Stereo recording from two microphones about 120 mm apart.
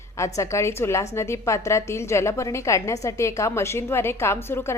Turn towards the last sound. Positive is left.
turn(degrees=20)  # may be behind; listen again after turning